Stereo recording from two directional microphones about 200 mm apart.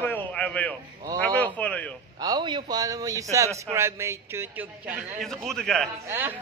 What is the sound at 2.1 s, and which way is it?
A man's voice, 20° right (ahead or behind).